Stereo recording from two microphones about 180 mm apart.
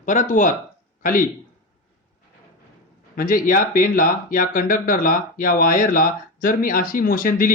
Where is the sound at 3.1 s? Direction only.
50° left (ahead or behind).